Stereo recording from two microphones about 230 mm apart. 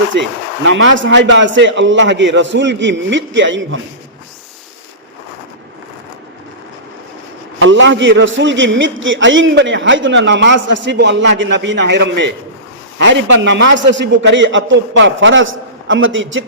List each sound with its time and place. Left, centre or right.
0.1 s a man's voice: right
7.6 s a man's voice: right